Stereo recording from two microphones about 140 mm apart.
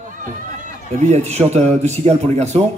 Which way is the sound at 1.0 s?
55° right (ahead or behind).